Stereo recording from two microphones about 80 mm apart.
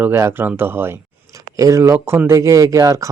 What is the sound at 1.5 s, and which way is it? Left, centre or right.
Speech, right.